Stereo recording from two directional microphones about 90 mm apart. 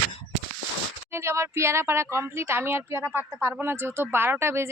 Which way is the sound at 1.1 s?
30° right (ahead or behind).